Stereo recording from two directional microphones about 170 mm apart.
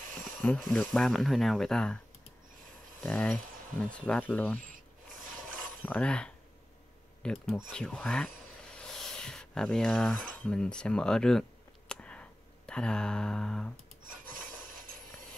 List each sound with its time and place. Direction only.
0.0 s a sound: 50° right (ahead or behind)
0.4 s speech: 5° left (ahead or behind)
3.0 s speech: 5° left (ahead or behind)
5.8 s speech: 5° left (ahead or behind)
11.9 s a sound: 5° left (ahead or behind)
14.0 s rub: 55° right (ahead or behind)